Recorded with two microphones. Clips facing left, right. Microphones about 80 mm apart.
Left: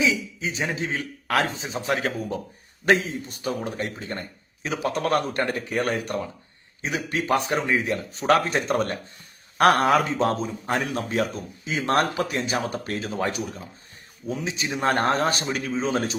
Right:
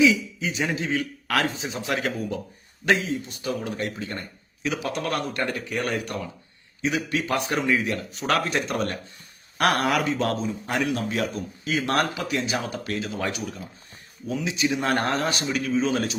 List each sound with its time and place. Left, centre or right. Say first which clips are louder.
0.0 s speech: right 4 dB; left